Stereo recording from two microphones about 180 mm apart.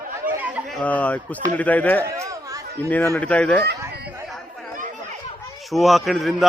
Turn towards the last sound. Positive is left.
turn(degrees=0)  # may be behind; listen again after turning